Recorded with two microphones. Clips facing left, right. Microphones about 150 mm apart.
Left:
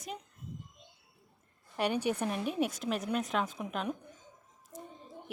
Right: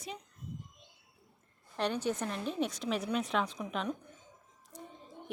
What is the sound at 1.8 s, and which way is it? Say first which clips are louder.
A woman's voice: left 2 dB; 10° left (ahead or behind).